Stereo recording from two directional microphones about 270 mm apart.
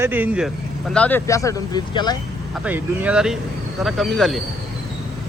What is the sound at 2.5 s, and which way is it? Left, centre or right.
A man's voice, centre.